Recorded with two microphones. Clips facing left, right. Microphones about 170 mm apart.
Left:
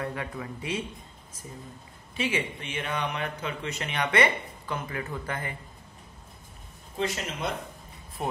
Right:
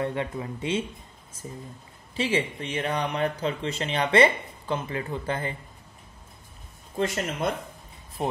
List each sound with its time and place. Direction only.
0.0 s speech: 25° right (ahead or behind)
2.1 s speech: 30° right (ahead or behind)
7.0 s speech: 50° right (ahead or behind)